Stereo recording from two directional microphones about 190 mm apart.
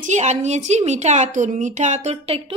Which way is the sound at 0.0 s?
40° right (ahead or behind).